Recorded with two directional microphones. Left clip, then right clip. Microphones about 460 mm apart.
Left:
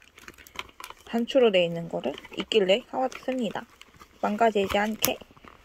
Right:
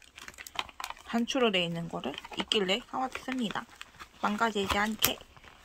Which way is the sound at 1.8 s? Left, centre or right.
Centre.